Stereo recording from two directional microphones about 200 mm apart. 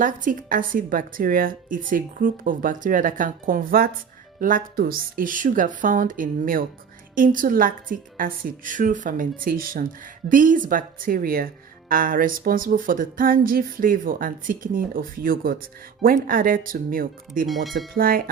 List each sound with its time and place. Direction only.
0.0 s speech: 45° right (ahead or behind)
17.5 s speech: centre (ahead or behind)
17.9 s speech: 45° right (ahead or behind)